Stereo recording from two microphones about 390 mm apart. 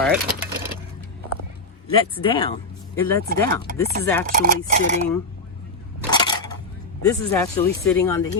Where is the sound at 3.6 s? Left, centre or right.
Right.